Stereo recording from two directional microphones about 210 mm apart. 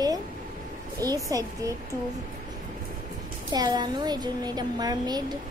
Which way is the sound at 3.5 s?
20° right (ahead or behind).